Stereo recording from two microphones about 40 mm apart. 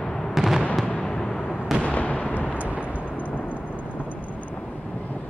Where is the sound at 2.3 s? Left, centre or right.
Left.